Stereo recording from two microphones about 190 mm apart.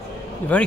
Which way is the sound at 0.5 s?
10° left (ahead or behind).